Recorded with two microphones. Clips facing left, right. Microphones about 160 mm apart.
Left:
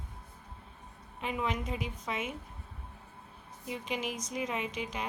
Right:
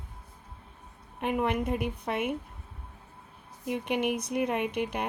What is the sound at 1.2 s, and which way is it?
A woman's voice, 55° right (ahead or behind).